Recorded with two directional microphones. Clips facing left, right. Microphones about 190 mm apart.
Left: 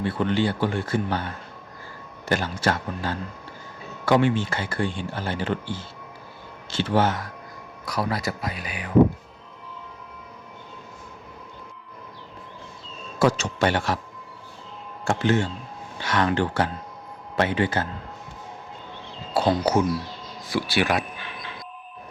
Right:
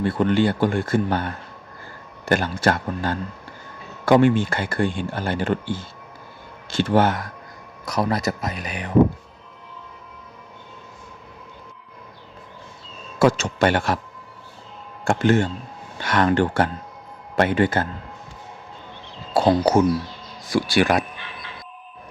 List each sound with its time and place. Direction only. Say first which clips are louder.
0.0 s speech: right 4 dB; 50° right (ahead or behind)
7.9 s speech: right 4 dB; 45° right (ahead or behind)
13.1 s speech: right 3 dB; 55° right (ahead or behind)
15.0 s speech: right 4 dB; 50° right (ahead or behind)
19.3 s speech: right 4 dB; 45° right (ahead or behind)